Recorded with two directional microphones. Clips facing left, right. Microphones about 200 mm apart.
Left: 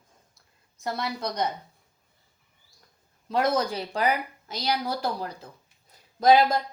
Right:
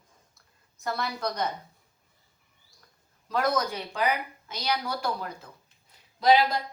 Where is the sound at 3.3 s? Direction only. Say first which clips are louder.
Left 2 dB; 30° left (ahead or behind).